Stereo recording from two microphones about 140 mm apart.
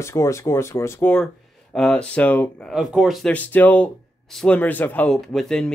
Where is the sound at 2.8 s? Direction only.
Centre (ahead or behind).